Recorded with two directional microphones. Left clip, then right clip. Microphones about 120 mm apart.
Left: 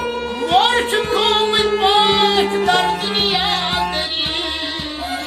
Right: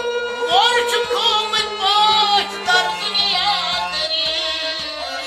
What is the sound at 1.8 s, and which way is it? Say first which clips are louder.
Music: right 1 dB; 5° right (ahead or behind).